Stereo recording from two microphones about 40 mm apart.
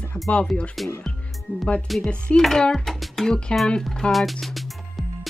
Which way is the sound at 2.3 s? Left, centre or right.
Left.